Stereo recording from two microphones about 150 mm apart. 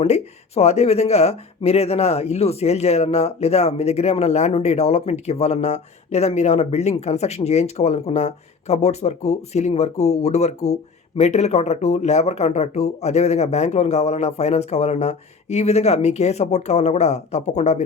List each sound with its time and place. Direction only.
0.0 s speech: 45° left (ahead or behind)